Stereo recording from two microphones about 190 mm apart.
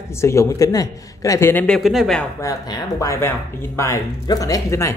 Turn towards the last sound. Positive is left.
turn(degrees=15)  # may be behind; listen again after turning